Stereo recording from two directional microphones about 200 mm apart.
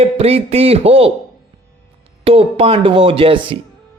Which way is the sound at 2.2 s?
30° right (ahead or behind).